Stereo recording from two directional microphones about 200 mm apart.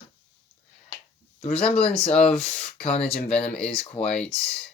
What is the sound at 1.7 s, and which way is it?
Speech, 30° left (ahead or behind).